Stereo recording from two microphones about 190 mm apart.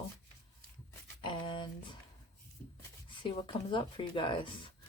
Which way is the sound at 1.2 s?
25° left (ahead or behind).